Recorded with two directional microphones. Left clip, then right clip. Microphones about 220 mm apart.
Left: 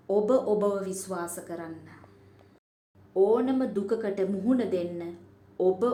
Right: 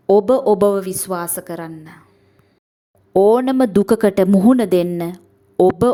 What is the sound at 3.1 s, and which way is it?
Speech, 45° right (ahead or behind).